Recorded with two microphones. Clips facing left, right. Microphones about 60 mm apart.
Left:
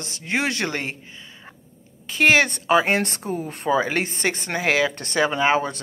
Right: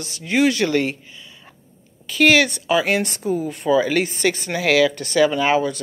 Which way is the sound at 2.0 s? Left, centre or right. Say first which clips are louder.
Right 2 dB; left.